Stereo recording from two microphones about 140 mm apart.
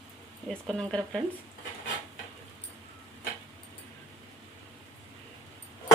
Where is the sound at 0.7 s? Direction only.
5° left (ahead or behind).